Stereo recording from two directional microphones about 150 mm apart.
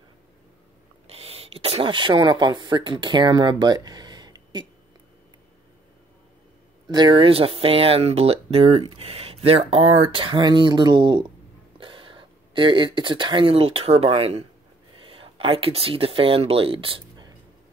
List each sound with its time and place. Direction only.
1.0 s speech: 40° right (ahead or behind)
6.9 s speech: 30° right (ahead or behind)